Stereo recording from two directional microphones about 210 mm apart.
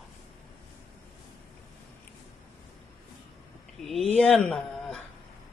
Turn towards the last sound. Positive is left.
turn(degrees=0)  # may be behind; listen again after turning